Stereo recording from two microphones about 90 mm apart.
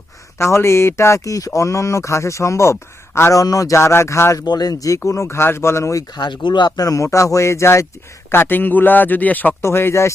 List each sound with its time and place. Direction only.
0.3 s a man's voice: 30° left (ahead or behind)
4.4 s speech: 45° left (ahead or behind)
6.1 s a man's voice: 55° left (ahead or behind); by 9.6 s 20° left (ahead or behind)
9.6 s speech: 30° left (ahead or behind)